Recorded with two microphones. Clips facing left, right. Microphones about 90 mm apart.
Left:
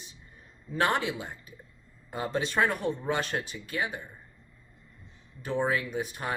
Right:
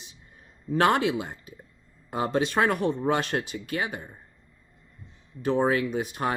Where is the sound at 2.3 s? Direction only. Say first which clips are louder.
Right 3 dB; 70° right (ahead or behind).